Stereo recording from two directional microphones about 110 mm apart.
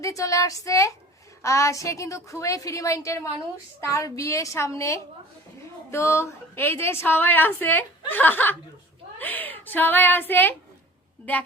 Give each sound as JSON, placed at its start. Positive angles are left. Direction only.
{"t": 0.0, "sound": "a woman's voice", "side_deg": 30}